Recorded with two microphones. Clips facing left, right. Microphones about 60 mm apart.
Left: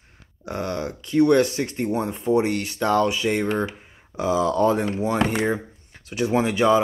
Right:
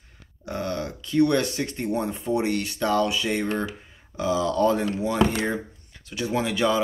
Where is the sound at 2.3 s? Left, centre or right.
Left.